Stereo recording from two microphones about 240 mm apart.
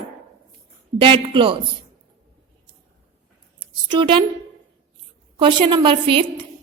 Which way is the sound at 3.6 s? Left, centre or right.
Right.